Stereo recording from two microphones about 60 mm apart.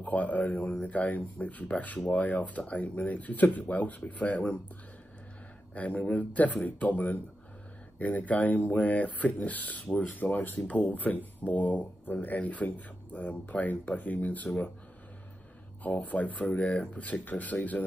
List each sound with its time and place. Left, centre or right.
0.0 s speech: left
5.8 s speech: left
15.8 s speech: left